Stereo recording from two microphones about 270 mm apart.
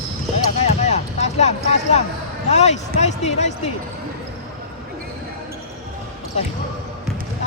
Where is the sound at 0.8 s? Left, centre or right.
Left.